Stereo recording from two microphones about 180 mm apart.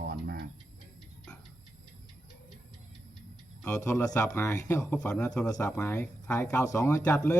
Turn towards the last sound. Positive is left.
turn(degrees=10)  # may be behind; listen again after turning